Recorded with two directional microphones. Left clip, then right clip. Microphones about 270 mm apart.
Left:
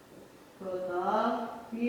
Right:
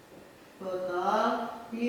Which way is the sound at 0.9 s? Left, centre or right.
Centre.